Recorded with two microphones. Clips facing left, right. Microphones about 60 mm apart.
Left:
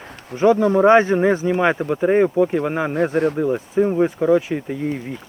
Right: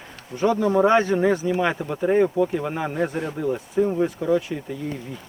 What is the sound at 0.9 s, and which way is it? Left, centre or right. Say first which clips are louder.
Speech: left 5 dB; left.